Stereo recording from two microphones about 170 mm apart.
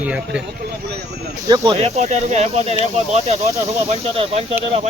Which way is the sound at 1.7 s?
40° right (ahead or behind).